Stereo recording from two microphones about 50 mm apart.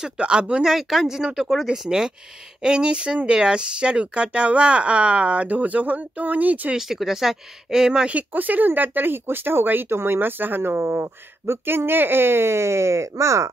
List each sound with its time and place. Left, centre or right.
0.0 s speech: centre
0.7 s speech: centre
1.7 s speech: centre; by 6.7 s right
6.9 s speech: centre
8.2 s speech: right